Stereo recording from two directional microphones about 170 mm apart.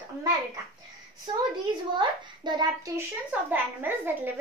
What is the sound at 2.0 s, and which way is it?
A child's voice, 25° right (ahead or behind).